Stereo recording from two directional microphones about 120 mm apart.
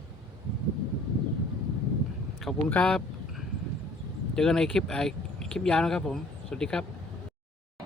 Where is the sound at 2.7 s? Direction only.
5° left (ahead or behind).